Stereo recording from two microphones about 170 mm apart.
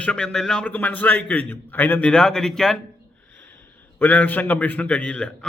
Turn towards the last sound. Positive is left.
turn(degrees=5)  # may be behind; listen again after turning